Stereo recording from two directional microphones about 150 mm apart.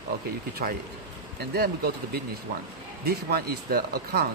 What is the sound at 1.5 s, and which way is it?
Speech, 90° right.